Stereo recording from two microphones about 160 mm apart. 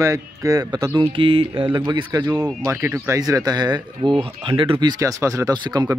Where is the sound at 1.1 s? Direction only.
35° right (ahead or behind).